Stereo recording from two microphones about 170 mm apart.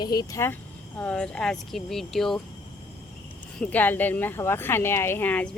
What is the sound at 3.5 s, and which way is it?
Speech, 10° left (ahead or behind).